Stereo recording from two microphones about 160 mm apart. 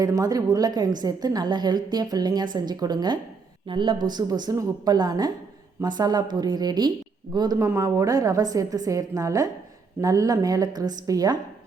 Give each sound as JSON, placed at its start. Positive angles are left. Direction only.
{"t": 0.0, "sound": "a woman's voice", "side_deg": -20}